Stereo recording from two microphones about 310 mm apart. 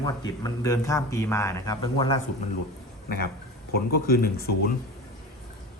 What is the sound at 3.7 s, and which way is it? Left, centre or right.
Speech, left.